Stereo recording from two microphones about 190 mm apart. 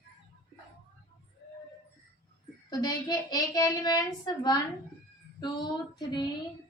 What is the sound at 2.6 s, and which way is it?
A child's voice, 20° left (ahead or behind).